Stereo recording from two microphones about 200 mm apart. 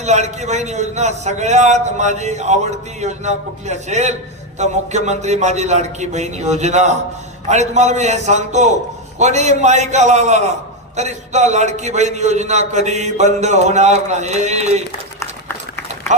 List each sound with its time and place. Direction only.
0.0 s a man's voice: 35° right (ahead or behind)